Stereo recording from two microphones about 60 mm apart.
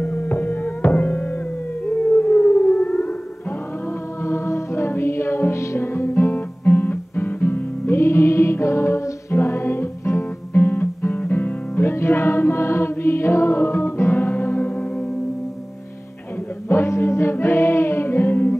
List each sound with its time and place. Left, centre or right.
0.0 s music: left
1.9 s siren: left
2.9 s a sound: left
4.2 s music: left
11.9 s music: left
16.6 s music: left